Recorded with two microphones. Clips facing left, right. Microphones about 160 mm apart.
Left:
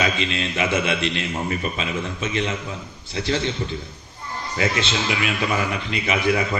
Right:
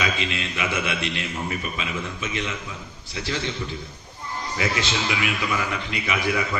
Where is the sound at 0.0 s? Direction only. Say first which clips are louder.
Left 3 dB; 30° left (ahead or behind).